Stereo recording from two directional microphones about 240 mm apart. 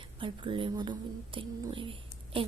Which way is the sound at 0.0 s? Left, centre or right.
Right.